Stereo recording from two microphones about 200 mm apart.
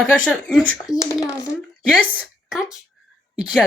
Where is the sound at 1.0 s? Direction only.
15° left (ahead or behind).